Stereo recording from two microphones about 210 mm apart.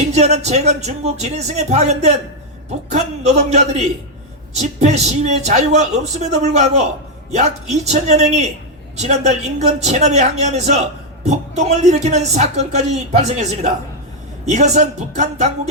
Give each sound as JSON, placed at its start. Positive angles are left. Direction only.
{"t": 0.1, "sound": "speech", "side_deg": -30}